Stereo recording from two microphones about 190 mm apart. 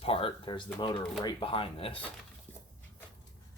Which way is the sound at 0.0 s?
30° left (ahead or behind).